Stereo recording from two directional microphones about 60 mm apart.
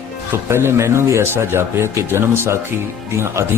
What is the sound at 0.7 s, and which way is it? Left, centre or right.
Speech, right.